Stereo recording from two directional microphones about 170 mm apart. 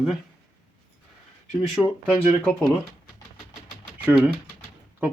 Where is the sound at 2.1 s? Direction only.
10° right (ahead or behind).